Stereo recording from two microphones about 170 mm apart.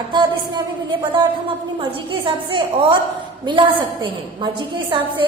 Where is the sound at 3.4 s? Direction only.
30° right (ahead or behind).